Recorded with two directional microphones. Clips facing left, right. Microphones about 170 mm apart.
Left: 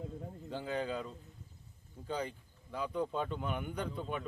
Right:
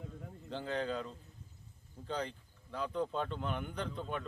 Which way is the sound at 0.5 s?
5° left (ahead or behind).